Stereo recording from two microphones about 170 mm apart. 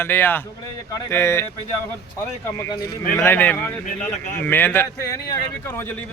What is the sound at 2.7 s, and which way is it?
Speech, 65° left (ahead or behind).